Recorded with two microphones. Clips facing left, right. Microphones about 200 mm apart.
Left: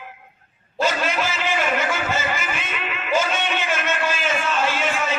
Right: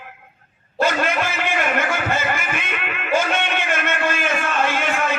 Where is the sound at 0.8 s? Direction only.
55° right (ahead or behind).